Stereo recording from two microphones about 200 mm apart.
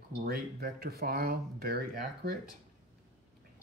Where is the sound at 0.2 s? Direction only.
50° right (ahead or behind).